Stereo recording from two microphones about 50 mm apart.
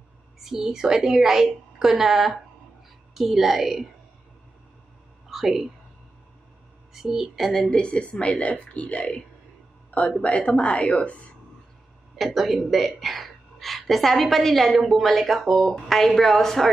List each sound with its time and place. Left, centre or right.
0.4 s a woman's voice: centre
5.3 s a woman's voice: centre
6.9 s a woman's voice: centre
7.4 s a woman's voice: centre
7.7 s speech: left
9.8 s a sound: left
10.2 s speech: left
12.2 s a woman's voice: centre
15.7 s speech: centre